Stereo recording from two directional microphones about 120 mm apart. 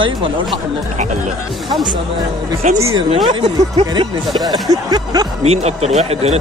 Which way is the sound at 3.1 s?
45° right (ahead or behind).